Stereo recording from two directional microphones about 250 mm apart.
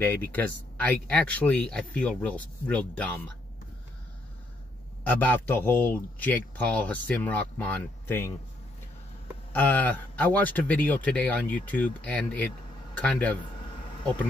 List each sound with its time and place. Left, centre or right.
0.0 s speech: centre
5.0 s speech: centre
9.5 s speech: centre